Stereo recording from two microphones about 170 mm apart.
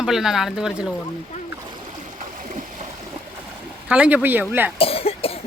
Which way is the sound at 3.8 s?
10° right (ahead or behind).